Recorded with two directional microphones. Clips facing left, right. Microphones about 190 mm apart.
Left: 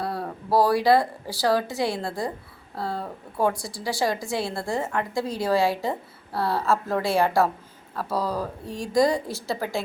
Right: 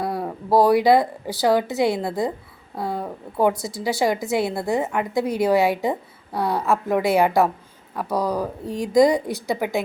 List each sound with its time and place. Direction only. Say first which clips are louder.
0.0 s a woman's voice: right 4 dB; 20° right (ahead or behind)